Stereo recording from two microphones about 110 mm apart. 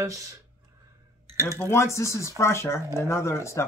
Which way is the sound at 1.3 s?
30° right (ahead or behind).